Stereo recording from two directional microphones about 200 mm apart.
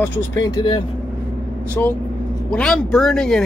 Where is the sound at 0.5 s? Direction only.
20° left (ahead or behind).